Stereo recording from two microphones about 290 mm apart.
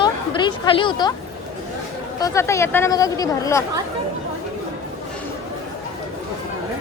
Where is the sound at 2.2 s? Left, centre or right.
Centre.